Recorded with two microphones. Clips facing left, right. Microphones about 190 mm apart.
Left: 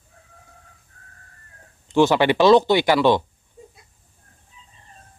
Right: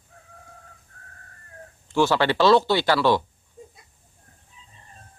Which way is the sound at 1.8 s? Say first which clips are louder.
Left 4 dB; 20° left (ahead or behind).